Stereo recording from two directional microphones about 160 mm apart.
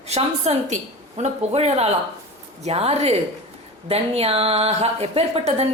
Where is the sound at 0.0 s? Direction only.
40° right (ahead or behind).